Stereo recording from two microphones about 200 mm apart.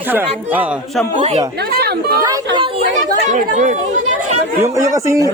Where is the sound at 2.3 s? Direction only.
25° right (ahead or behind).